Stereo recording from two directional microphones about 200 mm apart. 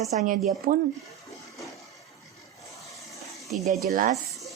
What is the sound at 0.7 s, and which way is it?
Speech, 45° right (ahead or behind).